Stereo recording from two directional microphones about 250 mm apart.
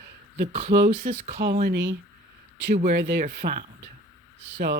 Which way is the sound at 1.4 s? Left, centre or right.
Right.